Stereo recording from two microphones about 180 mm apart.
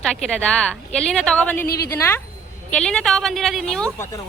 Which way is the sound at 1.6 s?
60° left (ahead or behind).